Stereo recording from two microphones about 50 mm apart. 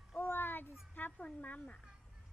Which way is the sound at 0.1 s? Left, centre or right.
Left.